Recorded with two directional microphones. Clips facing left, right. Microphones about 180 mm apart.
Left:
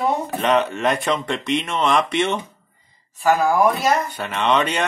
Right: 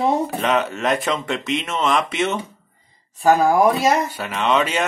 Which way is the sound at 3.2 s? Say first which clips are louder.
Right 2 dB; 35° right (ahead or behind).